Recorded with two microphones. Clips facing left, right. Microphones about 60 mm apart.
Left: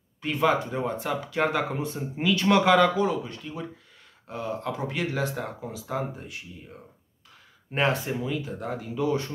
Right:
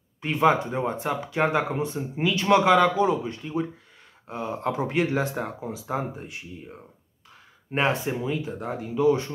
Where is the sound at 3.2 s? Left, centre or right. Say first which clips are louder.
Right 7 dB; centre.